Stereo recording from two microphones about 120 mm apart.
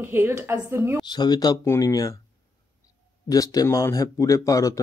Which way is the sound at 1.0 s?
40° left (ahead or behind).